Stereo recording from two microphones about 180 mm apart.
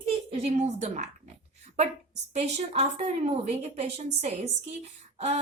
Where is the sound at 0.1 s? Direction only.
35° right (ahead or behind).